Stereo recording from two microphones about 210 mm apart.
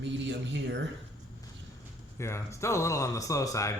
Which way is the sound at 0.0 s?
55° right (ahead or behind).